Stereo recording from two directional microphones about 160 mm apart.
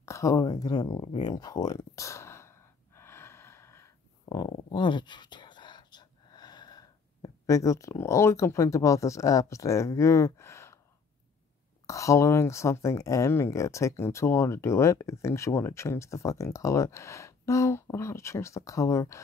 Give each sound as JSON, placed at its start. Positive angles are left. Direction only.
{"t": 0.0, "sound": "a sound", "side_deg": 20}
{"t": 4.3, "sound": "speech", "side_deg": 30}
{"t": 11.8, "sound": "speech", "side_deg": 20}